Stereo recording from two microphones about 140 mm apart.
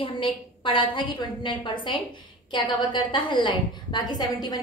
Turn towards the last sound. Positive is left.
turn(degrees=30)  # may be behind; listen again after turning